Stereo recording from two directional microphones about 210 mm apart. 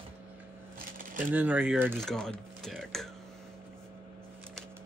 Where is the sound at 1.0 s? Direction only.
40° right (ahead or behind).